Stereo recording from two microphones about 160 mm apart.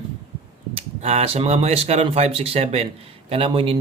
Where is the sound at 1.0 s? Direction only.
40° right (ahead or behind).